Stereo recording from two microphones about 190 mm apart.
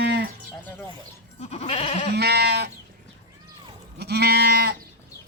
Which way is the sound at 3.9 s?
60° right (ahead or behind).